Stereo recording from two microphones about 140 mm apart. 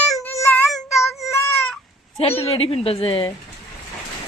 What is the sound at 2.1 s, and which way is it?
A woman's voice, 45° left (ahead or behind).